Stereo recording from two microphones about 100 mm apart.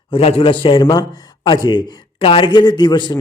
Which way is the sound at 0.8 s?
45° left (ahead or behind).